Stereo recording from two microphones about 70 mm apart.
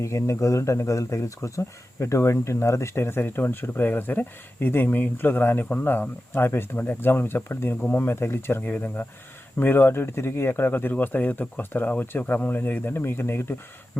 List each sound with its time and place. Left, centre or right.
0.0 s speech: left